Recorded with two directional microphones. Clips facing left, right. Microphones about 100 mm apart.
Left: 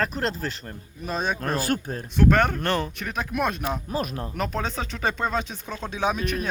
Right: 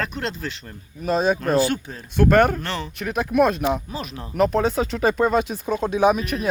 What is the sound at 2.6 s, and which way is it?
Speech, 50° left (ahead or behind).